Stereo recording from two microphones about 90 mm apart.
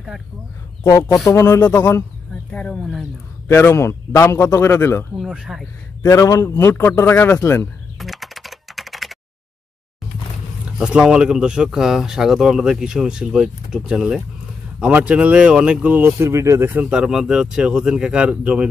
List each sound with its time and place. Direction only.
1.2 s speech: 30° left (ahead or behind)
1.6 s a man's voice: 20° left (ahead or behind)
2.5 s speech: 10° left (ahead or behind)
3.4 s a man's voice: 30° left (ahead or behind)
5.1 s speech: 10° right (ahead or behind)
6.0 s a man's voice: 35° left (ahead or behind)
8.0 s typing: centre (ahead or behind)
10.8 s speech: 10° right (ahead or behind)
16.2 s speech: 35° right (ahead or behind)
16.9 s speech: 5° right (ahead or behind)